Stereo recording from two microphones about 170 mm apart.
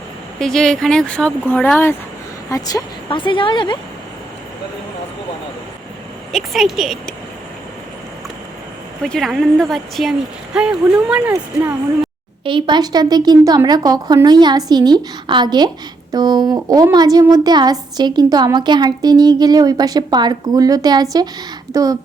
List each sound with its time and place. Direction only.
0.3 s a woman's voice: 5° left (ahead or behind); by 3.8 s 25° left (ahead or behind)
6.3 s a woman's voice: centre (ahead or behind)
9.0 s a woman's voice: centre (ahead or behind)
12.5 s speech: 30° right (ahead or behind)